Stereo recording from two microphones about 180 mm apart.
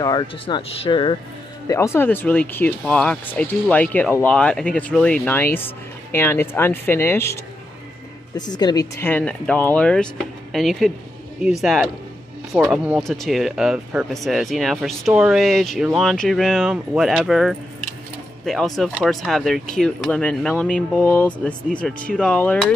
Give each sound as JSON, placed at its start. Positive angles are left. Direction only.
{"t": 0.0, "sound": "speech", "side_deg": 25}
{"t": 1.7, "sound": "speech", "side_deg": 15}
{"t": 8.4, "sound": "speech", "side_deg": 25}